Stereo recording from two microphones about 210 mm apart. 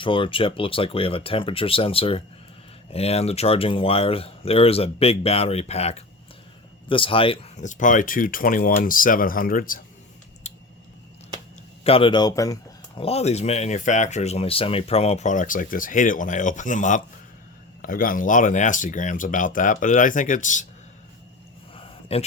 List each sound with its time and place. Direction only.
0.0 s speech: 25° left (ahead or behind); by 9.8 s 40° left (ahead or behind)
10.5 s a sound: 30° left (ahead or behind)
11.8 s speech: 25° left (ahead or behind)
13.0 s speech: 30° left (ahead or behind)
22.1 s speech: 30° left (ahead or behind)